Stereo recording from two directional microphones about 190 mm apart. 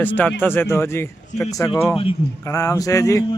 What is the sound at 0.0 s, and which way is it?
Speech, 10° left (ahead or behind).